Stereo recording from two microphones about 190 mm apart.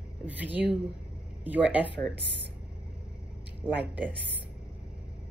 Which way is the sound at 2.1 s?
65° right (ahead or behind).